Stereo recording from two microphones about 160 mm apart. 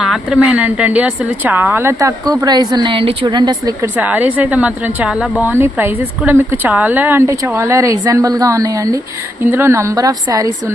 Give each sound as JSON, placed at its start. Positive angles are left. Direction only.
{"t": 0.0, "sound": "speech", "side_deg": -5}
{"t": 3.9, "sound": "a woman's voice", "side_deg": -10}